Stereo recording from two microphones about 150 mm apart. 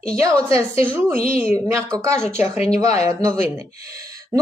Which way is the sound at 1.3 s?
15° right (ahead or behind).